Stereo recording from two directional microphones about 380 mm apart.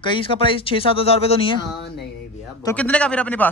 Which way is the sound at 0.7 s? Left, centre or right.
Centre.